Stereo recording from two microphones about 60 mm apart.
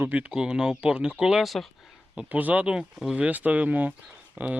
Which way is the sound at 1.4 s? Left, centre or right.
Centre.